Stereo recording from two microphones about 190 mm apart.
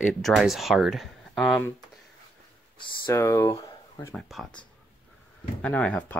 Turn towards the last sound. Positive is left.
turn(degrees=5)  # may be behind; listen again after turning